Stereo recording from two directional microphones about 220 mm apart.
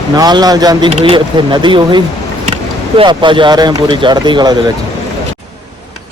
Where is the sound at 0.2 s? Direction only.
20° right (ahead or behind).